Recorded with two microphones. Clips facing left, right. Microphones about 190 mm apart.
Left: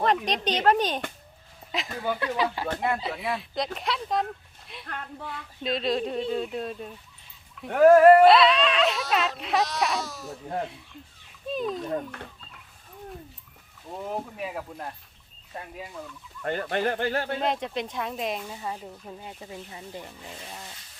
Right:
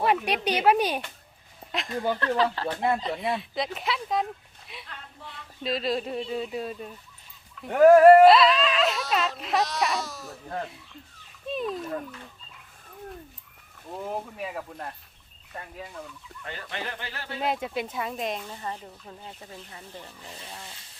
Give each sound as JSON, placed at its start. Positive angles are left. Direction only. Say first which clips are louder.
{"t": 0.0, "sound": "speech", "louder": "even", "side_deg": -10}
{"t": 1.7, "sound": "speech", "louder": "right 2 dB", "side_deg": 0}
{"t": 2.2, "sound": "speech", "louder": "right 1 dB", "side_deg": 10}
{"t": 4.9, "sound": "speech", "louder": "left 13 dB", "side_deg": 55}
{"t": 5.6, "sound": "speech", "louder": "left 1 dB", "side_deg": 0}
{"t": 11.4, "sound": "speech", "louder": "left 1 dB", "side_deg": 0}
{"t": 13.9, "sound": "speech", "louder": "even", "side_deg": 0}
{"t": 16.4, "sound": "speech", "louder": "left 10 dB", "side_deg": 50}
{"t": 17.4, "sound": "speech", "louder": "left 1 dB", "side_deg": -5}